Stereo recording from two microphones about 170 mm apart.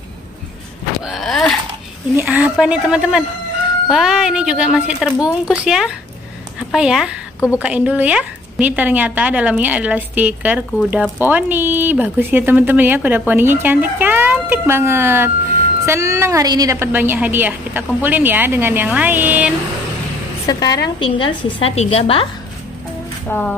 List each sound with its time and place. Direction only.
1.0 s a sound: centre (ahead or behind)
2.1 s a woman's voice: 10° right (ahead or behind)
7.3 s a woman's voice: 15° left (ahead or behind)
7.6 s a woman's voice: 10° right (ahead or behind)
20.4 s a woman's voice: 25° left (ahead or behind)
23.2 s speech: 10° left (ahead or behind)